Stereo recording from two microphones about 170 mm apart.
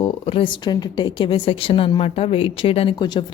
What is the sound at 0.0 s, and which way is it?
A woman's voice, 35° left (ahead or behind).